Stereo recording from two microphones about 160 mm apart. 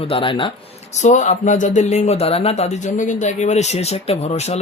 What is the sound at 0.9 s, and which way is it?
Speech, 50° left (ahead or behind).